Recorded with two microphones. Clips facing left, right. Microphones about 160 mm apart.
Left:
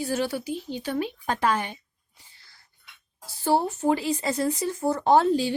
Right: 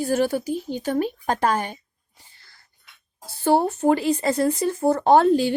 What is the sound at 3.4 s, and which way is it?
Speech, 60° right (ahead or behind).